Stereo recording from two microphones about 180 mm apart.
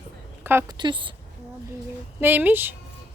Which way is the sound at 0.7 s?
25° right (ahead or behind).